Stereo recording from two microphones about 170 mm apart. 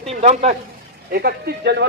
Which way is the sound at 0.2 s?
40° right (ahead or behind).